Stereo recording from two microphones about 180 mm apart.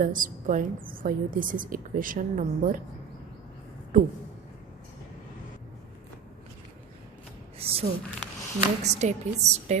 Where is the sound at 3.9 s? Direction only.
50° right (ahead or behind).